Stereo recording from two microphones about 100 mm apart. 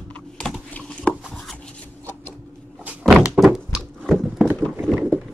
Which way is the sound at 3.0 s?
5° right (ahead or behind).